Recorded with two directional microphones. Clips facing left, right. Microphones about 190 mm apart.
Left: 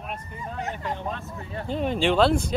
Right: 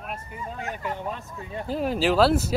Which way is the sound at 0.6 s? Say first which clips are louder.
Left 1 dB; 20° left (ahead or behind).